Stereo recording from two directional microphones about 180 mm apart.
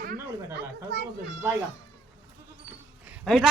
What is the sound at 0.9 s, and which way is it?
Speech, 70° right (ahead or behind).